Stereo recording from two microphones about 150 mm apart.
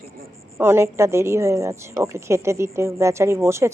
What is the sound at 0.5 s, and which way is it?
Speech, 15° right (ahead or behind).